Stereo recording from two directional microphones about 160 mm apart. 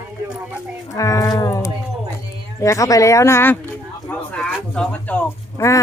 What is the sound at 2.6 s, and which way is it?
Speech, 20° left (ahead or behind).